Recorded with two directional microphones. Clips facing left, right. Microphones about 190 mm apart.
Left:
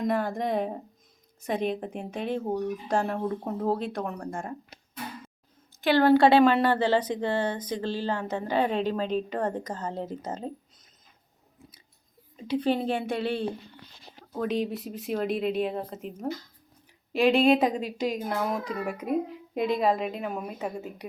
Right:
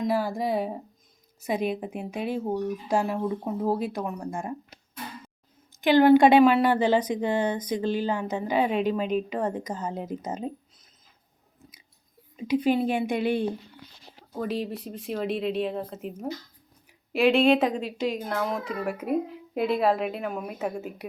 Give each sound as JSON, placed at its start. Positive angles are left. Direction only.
{"t": 0.0, "sound": "a child's voice", "side_deg": -5}
{"t": 5.8, "sound": "a woman's voice", "side_deg": -15}
{"t": 12.5, "sound": "a woman's voice", "side_deg": -10}